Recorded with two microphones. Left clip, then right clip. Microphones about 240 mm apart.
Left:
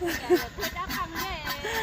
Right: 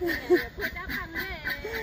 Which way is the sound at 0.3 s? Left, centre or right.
Left.